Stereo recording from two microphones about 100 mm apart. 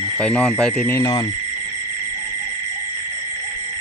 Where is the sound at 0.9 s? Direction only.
25° left (ahead or behind).